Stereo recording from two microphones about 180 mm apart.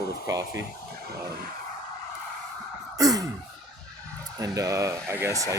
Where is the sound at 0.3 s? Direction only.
20° right (ahead or behind).